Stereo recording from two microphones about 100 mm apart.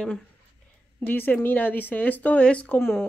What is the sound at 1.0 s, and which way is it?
A woman's voice, 20° left (ahead or behind).